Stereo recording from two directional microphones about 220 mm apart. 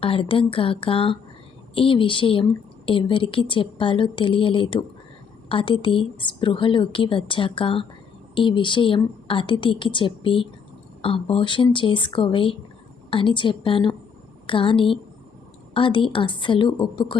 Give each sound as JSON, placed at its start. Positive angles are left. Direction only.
{"t": 0.0, "sound": "a woman's voice", "side_deg": 25}